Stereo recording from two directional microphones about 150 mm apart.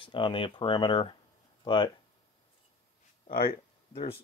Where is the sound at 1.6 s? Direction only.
30° left (ahead or behind).